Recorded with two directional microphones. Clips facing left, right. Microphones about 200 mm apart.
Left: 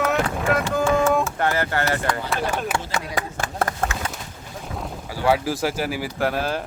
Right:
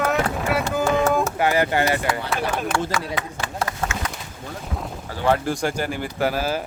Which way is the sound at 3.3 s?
50° left (ahead or behind).